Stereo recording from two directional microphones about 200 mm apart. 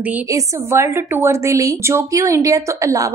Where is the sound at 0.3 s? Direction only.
15° right (ahead or behind).